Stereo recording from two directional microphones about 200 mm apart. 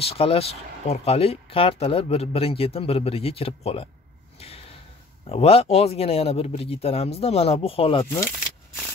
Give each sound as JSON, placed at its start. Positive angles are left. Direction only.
{"t": 0.0, "sound": "speech", "side_deg": 30}
{"t": 4.4, "sound": "a sound", "side_deg": 30}
{"t": 5.2, "sound": "speech", "side_deg": 30}